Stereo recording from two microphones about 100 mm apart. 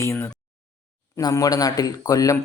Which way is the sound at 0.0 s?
30° left (ahead or behind).